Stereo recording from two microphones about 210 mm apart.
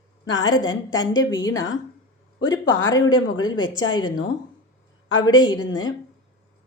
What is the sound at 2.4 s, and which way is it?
Speech, 65° left (ahead or behind).